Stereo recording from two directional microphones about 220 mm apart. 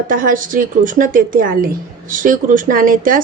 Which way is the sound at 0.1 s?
40° right (ahead or behind).